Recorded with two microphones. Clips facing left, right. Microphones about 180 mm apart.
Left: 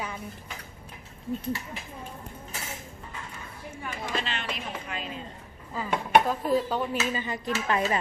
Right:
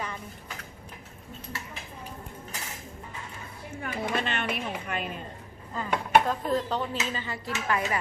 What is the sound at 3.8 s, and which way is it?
Speech, 55° right (ahead or behind).